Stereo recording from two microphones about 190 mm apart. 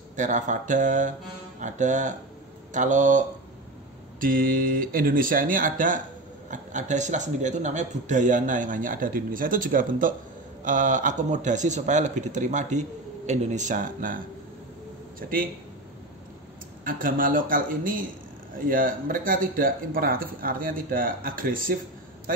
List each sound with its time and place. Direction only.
0.1 s speech: 40° right (ahead or behind)
16.8 s speech: 45° right (ahead or behind)